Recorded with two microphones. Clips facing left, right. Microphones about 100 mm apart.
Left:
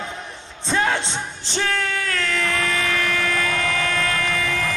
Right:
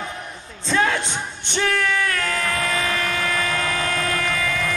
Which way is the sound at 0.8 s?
30° left (ahead or behind).